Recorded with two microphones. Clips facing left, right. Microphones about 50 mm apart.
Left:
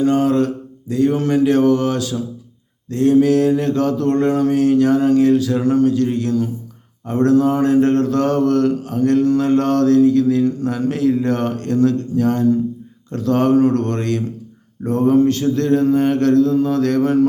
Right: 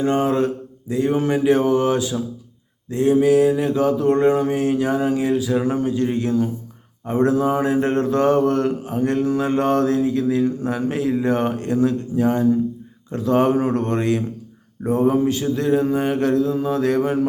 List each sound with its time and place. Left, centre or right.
0.0 s mantra: right